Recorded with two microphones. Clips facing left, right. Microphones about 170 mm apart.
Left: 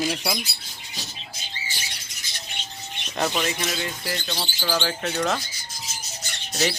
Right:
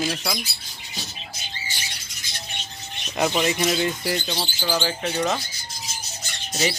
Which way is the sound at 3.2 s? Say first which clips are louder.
Right 3 dB; 10° right (ahead or behind).